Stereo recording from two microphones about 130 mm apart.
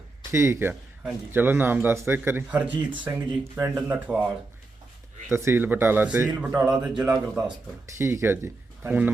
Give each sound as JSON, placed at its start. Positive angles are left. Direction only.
{"t": 0.3, "sound": "a man's voice", "side_deg": -20}
{"t": 5.3, "sound": "a man's voice", "side_deg": -20}
{"t": 7.9, "sound": "speech", "side_deg": -20}